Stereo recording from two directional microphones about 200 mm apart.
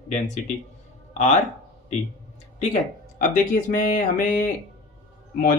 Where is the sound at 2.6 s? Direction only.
40° left (ahead or behind).